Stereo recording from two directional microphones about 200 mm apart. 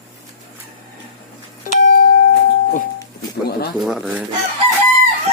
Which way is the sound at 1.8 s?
45° left (ahead or behind).